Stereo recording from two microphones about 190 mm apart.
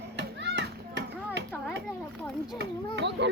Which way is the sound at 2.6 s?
65° right (ahead or behind).